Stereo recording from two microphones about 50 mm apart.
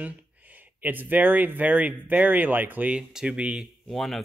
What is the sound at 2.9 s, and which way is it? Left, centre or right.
Speech, centre.